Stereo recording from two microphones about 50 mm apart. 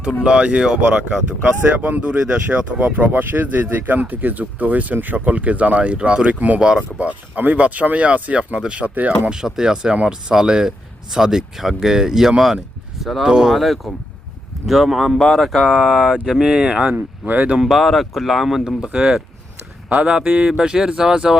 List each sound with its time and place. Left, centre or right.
0.2 s speech: centre
1.8 s speech: right
2.0 s speech: right
7.3 s speech: right
9.3 s speech: centre
13.2 s speech: centre
13.6 s speech: centre
16.5 s speech: centre
16.9 s speech: right
17.7 s speech: centre
18.9 s speech: right